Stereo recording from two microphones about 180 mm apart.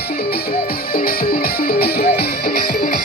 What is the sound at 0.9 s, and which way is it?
Music, 55° left (ahead or behind).